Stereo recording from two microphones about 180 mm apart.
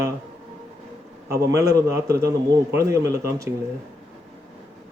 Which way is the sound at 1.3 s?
15° right (ahead or behind).